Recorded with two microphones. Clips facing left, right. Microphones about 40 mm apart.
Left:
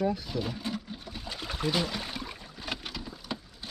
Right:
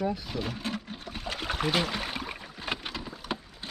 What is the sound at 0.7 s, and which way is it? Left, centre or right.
Water, centre.